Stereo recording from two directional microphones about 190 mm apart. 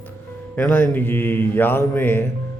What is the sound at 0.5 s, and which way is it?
Mantra, 10° left (ahead or behind).